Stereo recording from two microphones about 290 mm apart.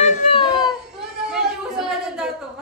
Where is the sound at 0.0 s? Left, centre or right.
Centre.